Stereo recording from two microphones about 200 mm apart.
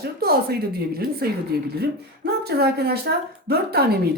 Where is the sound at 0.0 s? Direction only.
50° right (ahead or behind).